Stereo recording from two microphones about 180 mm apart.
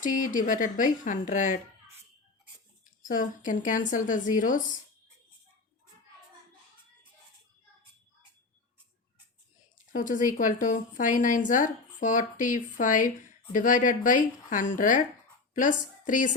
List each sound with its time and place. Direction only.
0.0 s a woman's voice: 50° left (ahead or behind)
3.0 s a woman's voice: 50° left (ahead or behind)
9.9 s a woman's voice: 45° left (ahead or behind)